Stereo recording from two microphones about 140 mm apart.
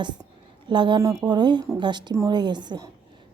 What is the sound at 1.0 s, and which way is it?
A woman's voice, 20° right (ahead or behind).